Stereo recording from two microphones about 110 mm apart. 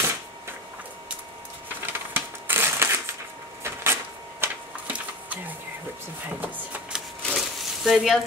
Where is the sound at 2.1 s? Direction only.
20° right (ahead or behind).